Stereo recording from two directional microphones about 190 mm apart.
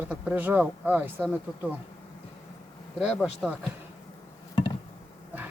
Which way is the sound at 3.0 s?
5° right (ahead or behind).